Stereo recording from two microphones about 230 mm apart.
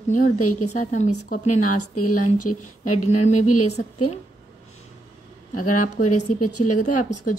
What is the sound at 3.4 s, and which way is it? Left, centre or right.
Speech, left.